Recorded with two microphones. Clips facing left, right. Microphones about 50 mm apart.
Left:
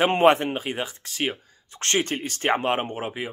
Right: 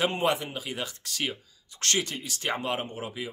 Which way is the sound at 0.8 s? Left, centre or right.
Left.